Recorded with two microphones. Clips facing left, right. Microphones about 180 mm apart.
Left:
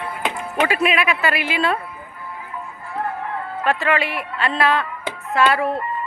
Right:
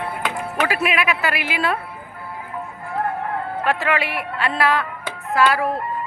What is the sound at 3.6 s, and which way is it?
A man's voice, 10° right (ahead or behind).